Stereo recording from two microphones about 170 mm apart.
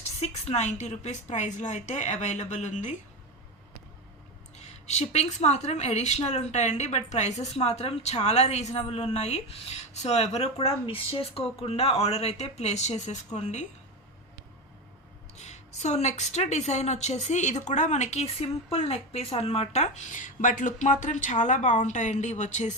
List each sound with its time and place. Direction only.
0.0 s a woman's voice: 40° left (ahead or behind)
4.5 s a woman's voice: 40° left (ahead or behind)
15.4 s a woman's voice: 40° left (ahead or behind)